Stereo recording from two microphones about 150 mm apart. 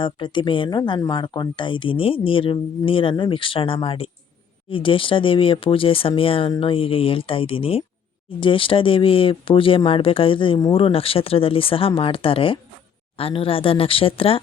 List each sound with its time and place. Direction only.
0.0 s speech: 35° left (ahead or behind)